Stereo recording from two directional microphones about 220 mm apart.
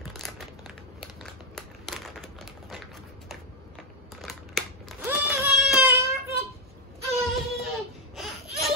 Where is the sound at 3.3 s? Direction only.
Centre (ahead or behind).